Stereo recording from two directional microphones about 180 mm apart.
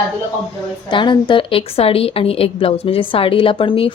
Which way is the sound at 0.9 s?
25° left (ahead or behind).